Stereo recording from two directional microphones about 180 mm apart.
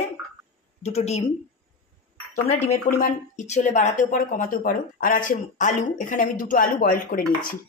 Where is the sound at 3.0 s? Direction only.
45° left (ahead or behind).